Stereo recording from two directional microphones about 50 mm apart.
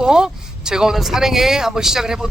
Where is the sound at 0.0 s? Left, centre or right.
Centre.